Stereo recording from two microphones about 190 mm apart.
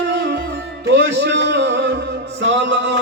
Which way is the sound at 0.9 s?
65° right (ahead or behind).